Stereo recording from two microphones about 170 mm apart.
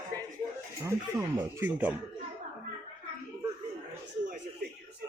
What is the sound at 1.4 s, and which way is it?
Speech, 10° right (ahead or behind).